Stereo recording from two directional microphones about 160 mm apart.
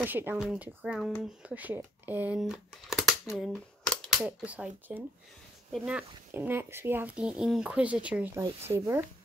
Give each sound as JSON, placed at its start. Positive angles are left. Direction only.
{"t": 0.0, "sound": "speech", "side_deg": -10}
{"t": 4.2, "sound": "speech", "side_deg": -10}